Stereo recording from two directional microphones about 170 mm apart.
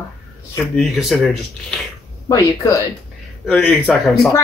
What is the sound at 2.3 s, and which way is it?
Speech, 20° left (ahead or behind).